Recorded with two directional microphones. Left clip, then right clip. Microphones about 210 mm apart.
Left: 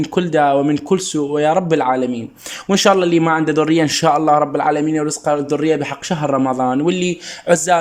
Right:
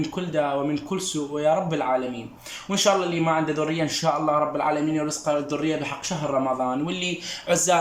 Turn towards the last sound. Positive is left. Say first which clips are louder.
# left 7 dB
turn(degrees=40)  # may be behind; listen again after turning